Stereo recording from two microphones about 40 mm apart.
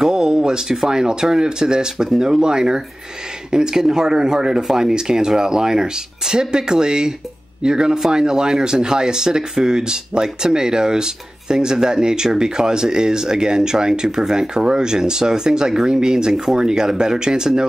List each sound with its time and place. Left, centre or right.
0.0 s speech: centre